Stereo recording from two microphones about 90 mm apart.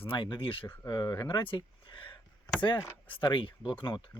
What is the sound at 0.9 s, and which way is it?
Speech, 55° left (ahead or behind).